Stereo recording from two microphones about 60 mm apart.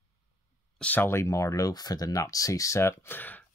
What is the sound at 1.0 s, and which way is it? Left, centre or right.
Speech, left.